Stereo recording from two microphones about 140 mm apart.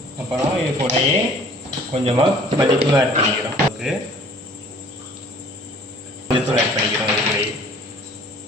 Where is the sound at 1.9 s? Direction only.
45° right (ahead or behind).